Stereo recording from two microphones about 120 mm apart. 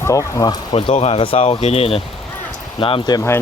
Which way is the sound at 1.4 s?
65° left (ahead or behind).